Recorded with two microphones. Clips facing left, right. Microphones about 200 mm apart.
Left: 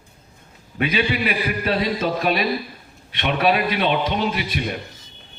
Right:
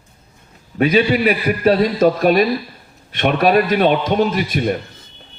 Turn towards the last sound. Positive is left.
turn(degrees=-45)  # may be behind; listen again after turning